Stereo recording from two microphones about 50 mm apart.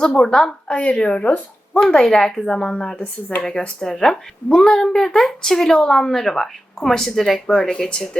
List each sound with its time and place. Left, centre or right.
0.0 s a woman's voice: centre
0.7 s speech: left
2.0 s a woman's voice: centre
3.8 s a woman's voice: centre